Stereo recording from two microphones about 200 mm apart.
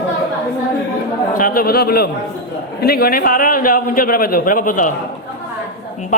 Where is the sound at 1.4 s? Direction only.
45° left (ahead or behind).